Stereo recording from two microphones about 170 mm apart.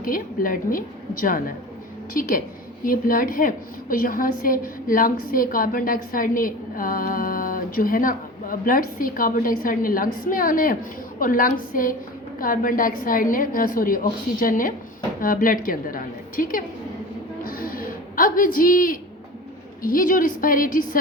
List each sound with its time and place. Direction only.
0.0 s a woman's voice: 55° left (ahead or behind)
2.8 s a woman's voice: 55° left (ahead or behind)
17.4 s a sound: 55° left (ahead or behind)
19.8 s a woman's voice: 55° left (ahead or behind)